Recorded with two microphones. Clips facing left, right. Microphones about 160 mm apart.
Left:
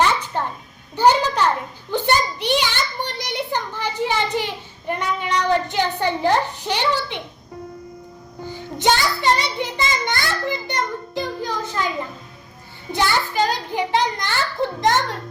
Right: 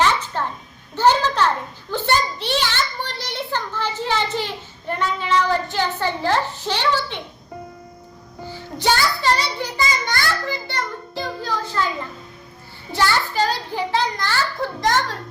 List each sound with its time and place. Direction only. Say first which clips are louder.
0.3 s music: left 1 dB; 15° left (ahead or behind)
0.9 s a sound: left 1 dB; 15° left (ahead or behind)
4.9 s child singing: right 1 dB; 15° left (ahead or behind)
8.8 s child singing: left 1 dB; 20° left (ahead or behind)
12.9 s a child's voice: even; 15° left (ahead or behind)